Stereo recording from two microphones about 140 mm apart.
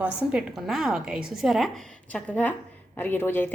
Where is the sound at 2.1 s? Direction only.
10° left (ahead or behind).